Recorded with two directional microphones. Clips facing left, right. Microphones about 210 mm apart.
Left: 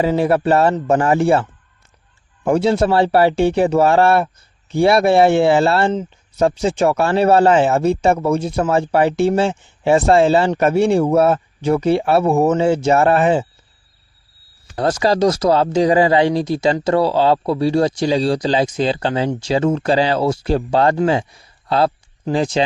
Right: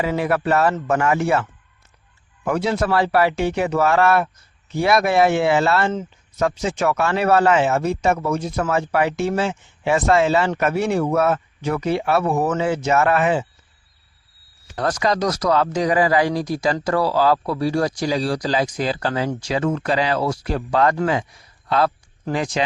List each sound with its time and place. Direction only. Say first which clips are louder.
0.0 s speech: left 5 dB; 30° left (ahead or behind)
14.8 s speech: left 5 dB; 30° left (ahead or behind)